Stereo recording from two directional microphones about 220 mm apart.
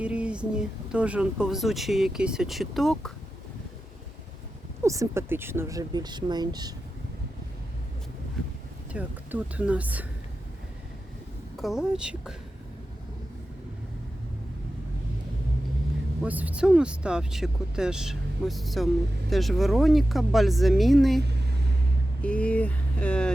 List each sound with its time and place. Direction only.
0.0 s speech: 5° right (ahead or behind)
4.8 s speech: 15° right (ahead or behind)
8.9 s speech: 5° right (ahead or behind)
11.5 s speech: centre (ahead or behind)
16.2 s speech: 5° right (ahead or behind)
21.2 s vehicle: 50° right (ahead or behind)
22.2 s speech: 5° left (ahead or behind)